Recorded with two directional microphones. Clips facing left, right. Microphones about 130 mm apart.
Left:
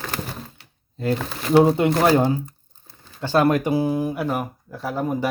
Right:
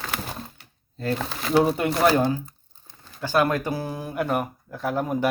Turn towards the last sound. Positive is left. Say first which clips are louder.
# even
turn(degrees=0)  # may be behind; listen again after turning